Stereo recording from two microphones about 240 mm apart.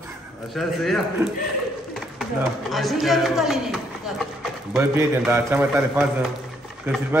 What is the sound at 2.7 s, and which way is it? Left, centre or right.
A man's voice, centre.